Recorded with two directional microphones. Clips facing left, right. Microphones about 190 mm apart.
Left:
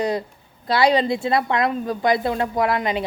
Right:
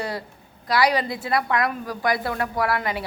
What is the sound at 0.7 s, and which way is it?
A woman's voice, 25° left (ahead or behind).